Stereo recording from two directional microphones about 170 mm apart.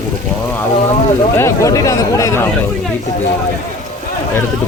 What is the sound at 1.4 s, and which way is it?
Speech, 15° left (ahead or behind).